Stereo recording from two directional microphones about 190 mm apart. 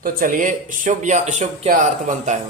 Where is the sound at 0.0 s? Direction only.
45° right (ahead or behind).